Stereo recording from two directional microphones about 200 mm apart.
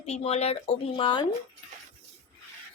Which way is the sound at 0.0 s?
30° left (ahead or behind).